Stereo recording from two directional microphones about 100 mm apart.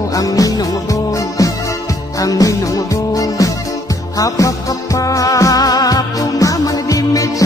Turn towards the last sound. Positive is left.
turn(degrees=35)  # may be behind; listen again after turning